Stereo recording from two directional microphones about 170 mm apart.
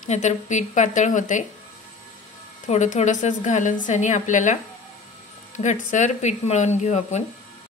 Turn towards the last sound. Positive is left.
turn(degrees=45)  # may be behind; listen again after turning